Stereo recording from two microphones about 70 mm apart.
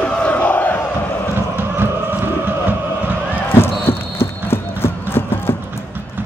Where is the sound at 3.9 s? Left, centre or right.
Left.